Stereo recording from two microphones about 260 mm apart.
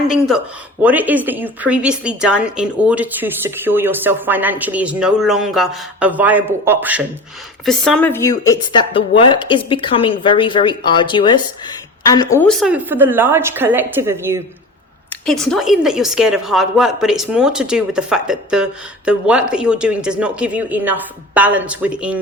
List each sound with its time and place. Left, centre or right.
0.8 s a woman's voice: centre
15.1 s a woman's voice: centre